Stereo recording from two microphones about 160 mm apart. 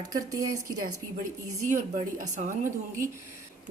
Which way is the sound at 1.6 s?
50° right (ahead or behind).